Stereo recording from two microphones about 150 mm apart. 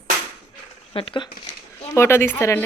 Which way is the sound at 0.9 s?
35° left (ahead or behind).